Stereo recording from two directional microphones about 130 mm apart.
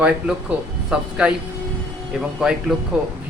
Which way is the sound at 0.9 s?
5° right (ahead or behind).